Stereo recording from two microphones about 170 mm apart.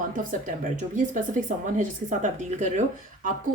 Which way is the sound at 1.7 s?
45° right (ahead or behind).